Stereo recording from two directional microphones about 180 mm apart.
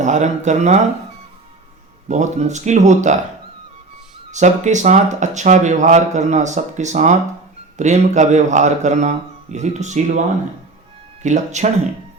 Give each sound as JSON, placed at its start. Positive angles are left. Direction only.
{"t": 0.0, "sound": "speech", "side_deg": -40}
{"t": 2.0, "sound": "speech", "side_deg": -40}
{"t": 4.3, "sound": "speech", "side_deg": -40}
{"t": 11.2, "sound": "speech", "side_deg": -40}